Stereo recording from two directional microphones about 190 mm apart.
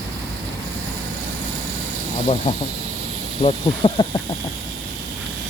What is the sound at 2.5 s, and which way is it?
Speech, 30° left (ahead or behind).